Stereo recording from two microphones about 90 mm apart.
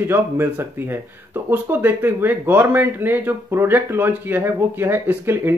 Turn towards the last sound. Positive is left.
turn(degrees=-25)  # may be behind; listen again after turning